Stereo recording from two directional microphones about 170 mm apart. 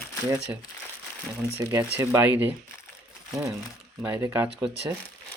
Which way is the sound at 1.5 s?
15° right (ahead or behind).